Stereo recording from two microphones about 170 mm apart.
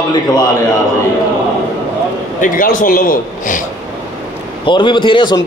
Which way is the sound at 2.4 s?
55° left (ahead or behind).